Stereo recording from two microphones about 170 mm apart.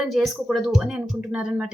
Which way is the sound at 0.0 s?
Centre (ahead or behind).